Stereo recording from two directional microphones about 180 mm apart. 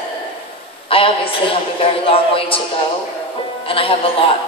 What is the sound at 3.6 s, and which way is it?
Speech, 30° left (ahead or behind).